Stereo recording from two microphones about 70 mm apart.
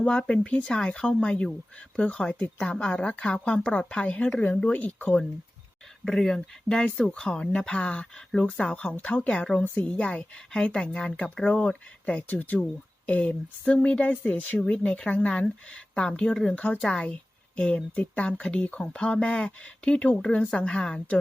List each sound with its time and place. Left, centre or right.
0.0 s a woman's voice: centre